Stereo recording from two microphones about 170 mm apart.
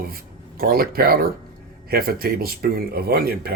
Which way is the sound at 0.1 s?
60° right (ahead or behind).